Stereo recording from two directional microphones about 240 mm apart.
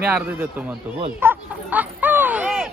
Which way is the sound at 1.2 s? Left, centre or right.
Centre.